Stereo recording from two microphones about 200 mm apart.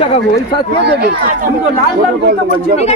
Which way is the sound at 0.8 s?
55° right (ahead or behind).